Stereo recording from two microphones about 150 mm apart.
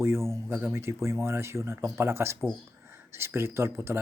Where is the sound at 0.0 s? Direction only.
15° right (ahead or behind).